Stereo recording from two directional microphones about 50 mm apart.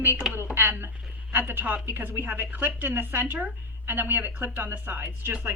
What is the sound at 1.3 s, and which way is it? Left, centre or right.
A woman's voice, right.